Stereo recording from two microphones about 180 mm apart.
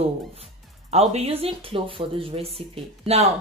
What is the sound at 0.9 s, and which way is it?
Speech, 35° right (ahead or behind).